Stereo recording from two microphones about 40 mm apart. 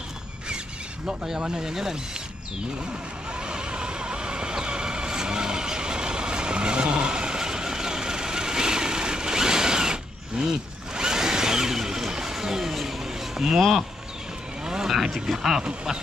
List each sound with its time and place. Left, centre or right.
1.0 s speech: centre
2.9 s vehicle: right
14.9 s a sound: centre
15.3 s speech: centre